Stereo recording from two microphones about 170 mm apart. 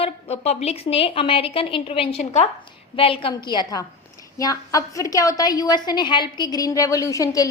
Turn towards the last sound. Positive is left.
turn(degrees=20)  # may be behind; listen again after turning